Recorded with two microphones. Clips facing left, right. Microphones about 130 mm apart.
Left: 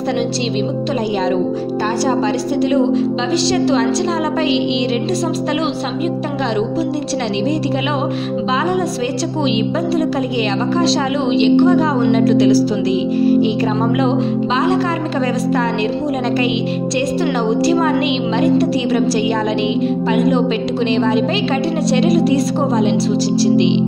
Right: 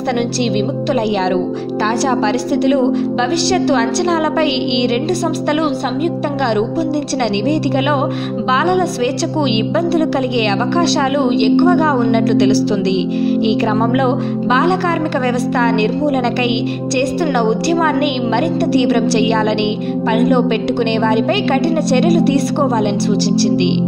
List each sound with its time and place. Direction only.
2.0 s a woman's voice: 75° right (ahead or behind)
10.7 s speech: 65° right (ahead or behind)
14.0 s speech: 60° right (ahead or behind)